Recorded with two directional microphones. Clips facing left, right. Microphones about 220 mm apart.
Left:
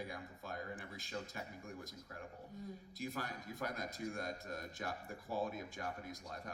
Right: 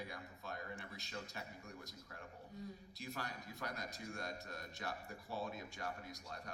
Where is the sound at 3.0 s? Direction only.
50° left (ahead or behind).